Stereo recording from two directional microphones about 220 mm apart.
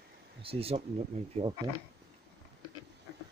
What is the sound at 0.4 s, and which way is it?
Speech, 25° right (ahead or behind).